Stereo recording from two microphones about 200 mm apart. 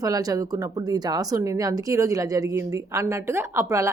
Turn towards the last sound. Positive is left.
turn(degrees=-15)  # may be behind; listen again after turning